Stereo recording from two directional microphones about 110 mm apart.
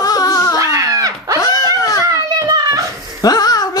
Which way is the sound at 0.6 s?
30° right (ahead or behind).